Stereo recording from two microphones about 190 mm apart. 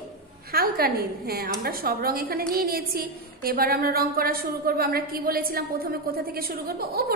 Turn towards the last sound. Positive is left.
turn(degrees=-55)  # may be behind; listen again after turning